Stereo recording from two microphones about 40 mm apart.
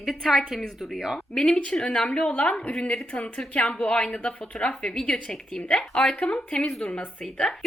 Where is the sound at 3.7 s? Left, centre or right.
Left.